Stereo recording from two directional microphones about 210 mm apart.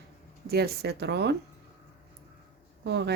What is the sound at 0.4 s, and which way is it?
Speech, 50° right (ahead or behind).